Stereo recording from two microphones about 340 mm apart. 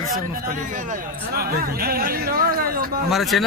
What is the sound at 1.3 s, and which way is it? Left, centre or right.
Speech, right.